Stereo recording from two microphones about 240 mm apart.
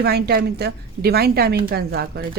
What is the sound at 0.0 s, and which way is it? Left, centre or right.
Speech, right.